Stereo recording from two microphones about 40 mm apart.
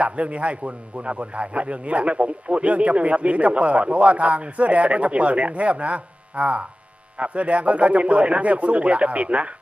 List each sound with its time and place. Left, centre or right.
0.0 s a man's voice: right